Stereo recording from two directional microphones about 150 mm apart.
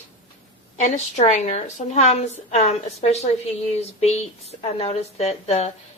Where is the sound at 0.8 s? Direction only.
50° left (ahead or behind).